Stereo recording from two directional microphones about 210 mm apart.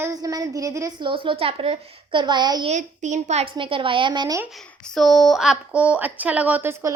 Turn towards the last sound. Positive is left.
turn(degrees=-10)  # may be behind; listen again after turning